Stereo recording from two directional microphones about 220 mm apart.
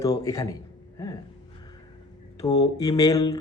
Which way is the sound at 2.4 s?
15° left (ahead or behind).